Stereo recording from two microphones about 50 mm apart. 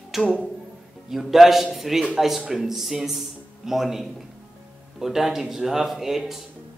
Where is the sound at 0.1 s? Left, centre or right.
Centre.